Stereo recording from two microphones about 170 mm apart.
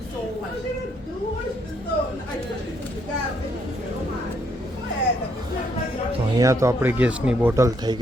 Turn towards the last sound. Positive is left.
turn(degrees=-20)  # may be behind; listen again after turning